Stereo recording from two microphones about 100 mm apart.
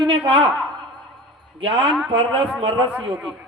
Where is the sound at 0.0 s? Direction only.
55° right (ahead or behind).